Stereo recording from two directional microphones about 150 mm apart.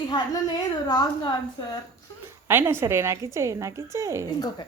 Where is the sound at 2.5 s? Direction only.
15° right (ahead or behind).